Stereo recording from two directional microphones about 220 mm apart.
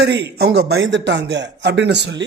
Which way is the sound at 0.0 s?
50° right (ahead or behind).